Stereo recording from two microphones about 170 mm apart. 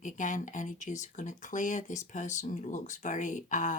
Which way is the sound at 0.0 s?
50° left (ahead or behind).